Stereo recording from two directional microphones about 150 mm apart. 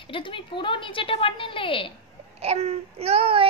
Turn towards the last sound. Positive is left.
turn(degrees=-40)  # may be behind; listen again after turning